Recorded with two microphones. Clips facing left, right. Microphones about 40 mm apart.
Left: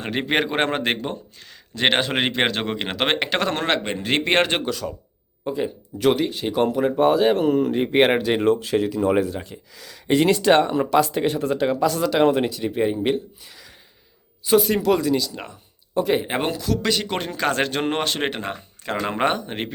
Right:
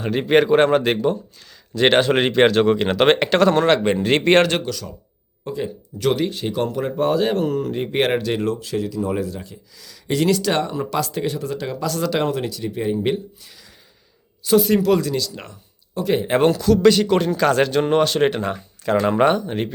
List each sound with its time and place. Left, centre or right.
0.1 s speech: left
1.8 s speech: centre
3.8 s speech: centre
4.4 s speech: left
5.5 s speech: centre
6.5 s speech: centre
8.4 s speech: left
11.9 s speech: centre
12.2 s speech: left
13.4 s a sound: centre
14.6 s speech: centre
17.1 s speech: left
17.6 s speech: left